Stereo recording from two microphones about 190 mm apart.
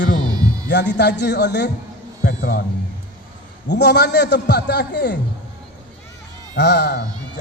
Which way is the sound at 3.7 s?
65° left (ahead or behind).